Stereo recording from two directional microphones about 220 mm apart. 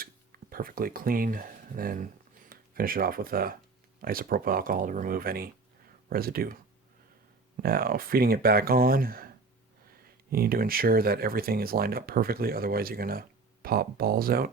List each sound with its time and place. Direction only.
0.0 s speech: 40° right (ahead or behind)